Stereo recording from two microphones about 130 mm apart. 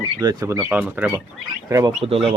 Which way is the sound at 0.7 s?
10° right (ahead or behind).